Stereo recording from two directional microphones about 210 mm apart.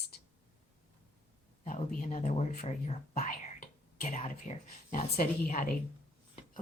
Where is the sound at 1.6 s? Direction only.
40° left (ahead or behind).